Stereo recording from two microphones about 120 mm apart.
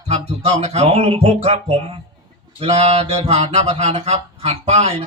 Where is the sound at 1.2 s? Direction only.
65° right (ahead or behind).